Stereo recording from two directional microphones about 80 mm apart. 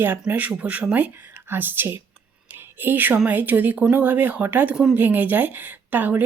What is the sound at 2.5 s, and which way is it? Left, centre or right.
Whispering, right.